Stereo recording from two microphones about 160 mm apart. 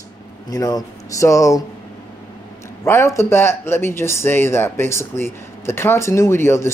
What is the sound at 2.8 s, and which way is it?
Speech, 15° left (ahead or behind).